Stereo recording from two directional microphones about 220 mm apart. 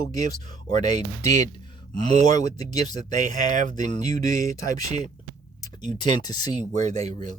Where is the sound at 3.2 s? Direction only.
35° right (ahead or behind).